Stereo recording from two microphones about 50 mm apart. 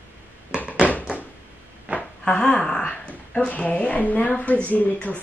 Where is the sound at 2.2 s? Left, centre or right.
Centre.